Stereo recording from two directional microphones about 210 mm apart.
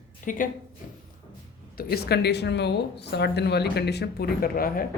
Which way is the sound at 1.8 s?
45° left (ahead or behind).